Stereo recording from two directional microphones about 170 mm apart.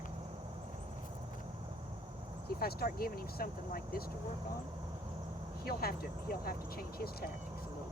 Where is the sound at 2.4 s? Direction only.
65° left (ahead or behind).